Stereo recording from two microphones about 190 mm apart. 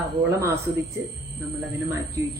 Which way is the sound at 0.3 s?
15° right (ahead or behind).